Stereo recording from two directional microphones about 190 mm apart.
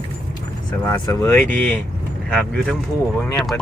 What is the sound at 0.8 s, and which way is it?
Speech, 15° left (ahead or behind).